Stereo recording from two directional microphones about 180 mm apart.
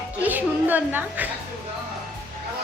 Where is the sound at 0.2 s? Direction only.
10° right (ahead or behind).